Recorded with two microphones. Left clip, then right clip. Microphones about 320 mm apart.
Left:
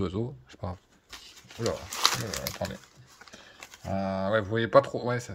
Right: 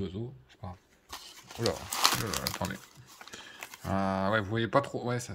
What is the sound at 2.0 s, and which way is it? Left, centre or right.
Speech, centre.